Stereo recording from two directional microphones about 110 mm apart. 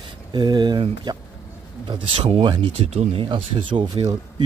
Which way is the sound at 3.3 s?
45° right (ahead or behind).